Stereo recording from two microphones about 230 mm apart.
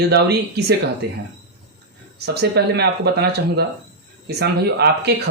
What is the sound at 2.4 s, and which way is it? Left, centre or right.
Speech, right.